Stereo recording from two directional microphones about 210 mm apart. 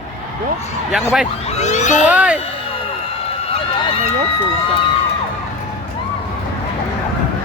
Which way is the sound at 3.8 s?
25° left (ahead or behind).